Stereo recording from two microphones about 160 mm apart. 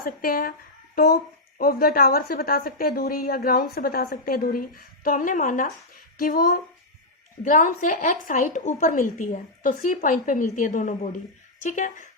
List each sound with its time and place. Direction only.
0.0 s speech: 65° left (ahead or behind)
1.5 s a woman's voice: 70° left (ahead or behind); by 12.0 s 50° left (ahead or behind)